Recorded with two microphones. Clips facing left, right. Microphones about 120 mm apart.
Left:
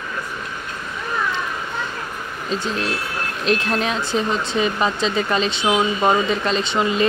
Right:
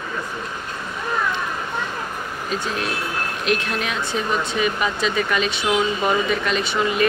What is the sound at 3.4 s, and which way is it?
Speech, 35° left (ahead or behind).